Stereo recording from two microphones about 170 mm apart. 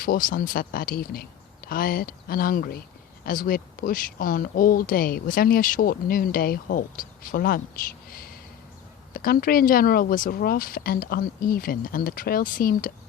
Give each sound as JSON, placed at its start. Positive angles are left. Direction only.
{"t": 0.0, "sound": "speech", "side_deg": 55}
{"t": 8.1, "sound": "bird", "side_deg": 60}
{"t": 9.1, "sound": "speech", "side_deg": 60}